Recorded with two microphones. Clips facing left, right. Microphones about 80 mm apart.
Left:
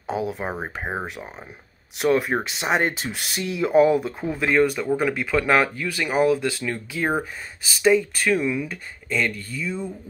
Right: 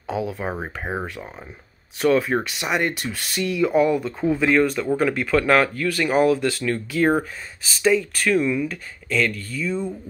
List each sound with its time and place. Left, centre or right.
0.0 s speech: left
2.6 s speech: left
4.2 s speech: centre